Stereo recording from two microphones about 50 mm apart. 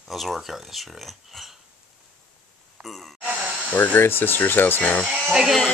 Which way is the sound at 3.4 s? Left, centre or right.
Right.